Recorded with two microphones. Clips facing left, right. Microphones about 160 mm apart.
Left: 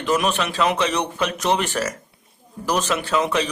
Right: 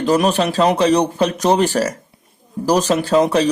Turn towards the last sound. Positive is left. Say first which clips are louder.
# right 7 dB
turn(degrees=-35)  # may be behind; listen again after turning